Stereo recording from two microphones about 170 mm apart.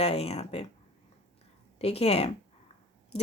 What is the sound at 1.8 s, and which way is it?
Speech, 35° left (ahead or behind).